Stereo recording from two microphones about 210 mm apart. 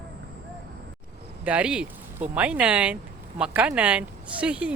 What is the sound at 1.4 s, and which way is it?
Speech, 5° right (ahead or behind).